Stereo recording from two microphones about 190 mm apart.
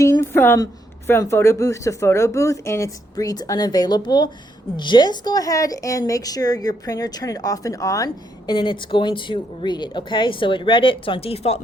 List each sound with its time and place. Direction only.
0.0 s a woman's voice: 10° left (ahead or behind); by 11.6 s 30° left (ahead or behind)